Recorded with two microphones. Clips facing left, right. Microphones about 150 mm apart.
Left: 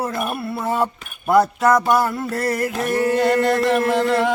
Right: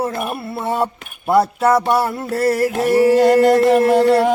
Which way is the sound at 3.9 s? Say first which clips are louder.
Right 5 dB; 35° right (ahead or behind).